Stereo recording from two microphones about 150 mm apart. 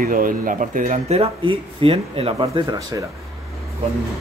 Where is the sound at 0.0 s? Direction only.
65° right (ahead or behind); by 2.6 s 40° right (ahead or behind).